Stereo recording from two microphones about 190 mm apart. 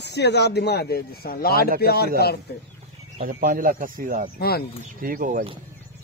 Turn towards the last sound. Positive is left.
turn(degrees=-45)  # may be behind; listen again after turning